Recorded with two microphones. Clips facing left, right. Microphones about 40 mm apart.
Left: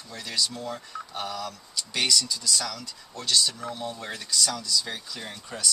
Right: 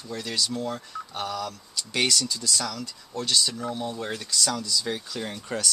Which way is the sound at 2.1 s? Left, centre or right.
Right.